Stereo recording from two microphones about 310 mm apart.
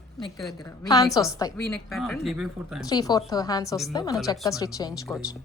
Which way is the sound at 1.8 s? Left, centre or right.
Centre.